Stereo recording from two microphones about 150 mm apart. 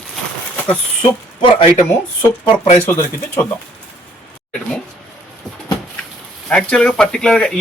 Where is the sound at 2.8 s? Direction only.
10° left (ahead or behind).